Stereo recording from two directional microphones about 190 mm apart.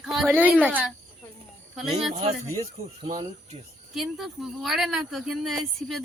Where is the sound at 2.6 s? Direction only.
35° right (ahead or behind).